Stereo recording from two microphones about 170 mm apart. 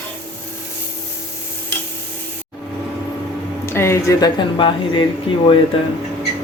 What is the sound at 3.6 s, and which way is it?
Speech, 15° left (ahead or behind).